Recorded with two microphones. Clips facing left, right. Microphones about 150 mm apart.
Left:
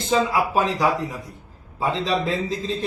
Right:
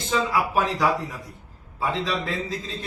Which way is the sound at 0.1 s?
25° left (ahead or behind).